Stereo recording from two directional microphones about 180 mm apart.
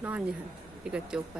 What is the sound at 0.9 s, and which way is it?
Speech, 5° right (ahead or behind).